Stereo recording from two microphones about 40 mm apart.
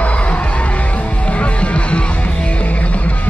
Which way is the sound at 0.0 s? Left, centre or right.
Left.